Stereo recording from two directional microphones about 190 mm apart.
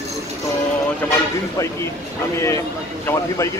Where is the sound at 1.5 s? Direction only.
15° left (ahead or behind).